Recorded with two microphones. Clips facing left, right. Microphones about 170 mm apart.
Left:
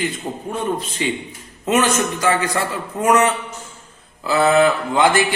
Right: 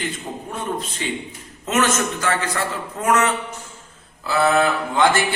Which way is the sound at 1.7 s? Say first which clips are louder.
Left 3 dB; 15° left (ahead or behind).